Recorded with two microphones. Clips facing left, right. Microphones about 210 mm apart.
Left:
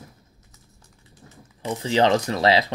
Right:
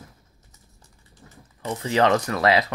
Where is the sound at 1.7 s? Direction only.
25° left (ahead or behind).